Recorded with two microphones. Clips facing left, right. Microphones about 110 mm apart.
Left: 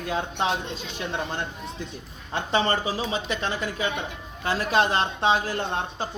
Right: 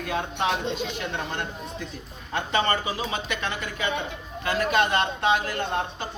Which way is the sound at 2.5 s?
30° left (ahead or behind).